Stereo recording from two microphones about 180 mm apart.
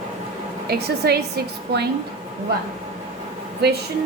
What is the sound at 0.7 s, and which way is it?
A woman's voice, 60° right (ahead or behind).